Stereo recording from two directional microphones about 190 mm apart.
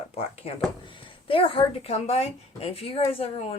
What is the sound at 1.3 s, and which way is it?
Speech, 30° left (ahead or behind).